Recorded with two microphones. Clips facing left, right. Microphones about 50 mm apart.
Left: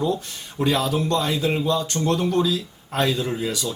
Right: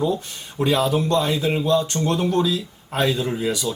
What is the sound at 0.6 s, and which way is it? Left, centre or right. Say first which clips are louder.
A man's voice: right 2 dB; centre.